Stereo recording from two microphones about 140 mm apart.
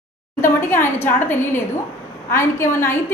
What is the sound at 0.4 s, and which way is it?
A woman's voice, 15° left (ahead or behind).